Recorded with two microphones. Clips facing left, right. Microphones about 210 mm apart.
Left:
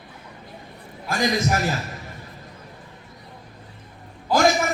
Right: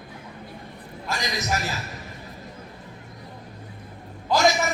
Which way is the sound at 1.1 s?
50° left (ahead or behind).